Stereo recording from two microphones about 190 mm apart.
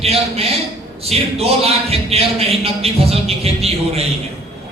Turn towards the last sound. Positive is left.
turn(degrees=-30)  # may be behind; listen again after turning